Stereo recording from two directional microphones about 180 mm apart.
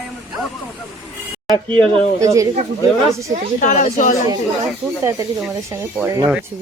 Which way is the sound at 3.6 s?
45° left (ahead or behind).